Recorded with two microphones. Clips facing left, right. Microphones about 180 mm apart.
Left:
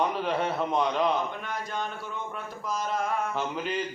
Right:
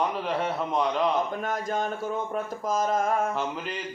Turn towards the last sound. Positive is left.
turn(degrees=0)  # may be behind; listen again after turning